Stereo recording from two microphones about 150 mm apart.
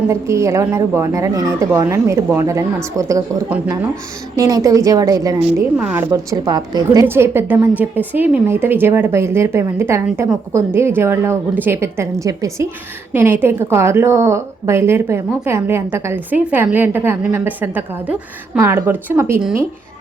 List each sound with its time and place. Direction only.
0.1 s a woman's voice: 20° right (ahead or behind)
4.4 s a woman's voice: 20° right (ahead or behind)
5.4 s a woman's voice: 10° right (ahead or behind)
6.1 s a woman's voice: 25° right (ahead or behind)